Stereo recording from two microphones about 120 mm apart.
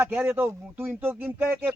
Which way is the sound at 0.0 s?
15° right (ahead or behind).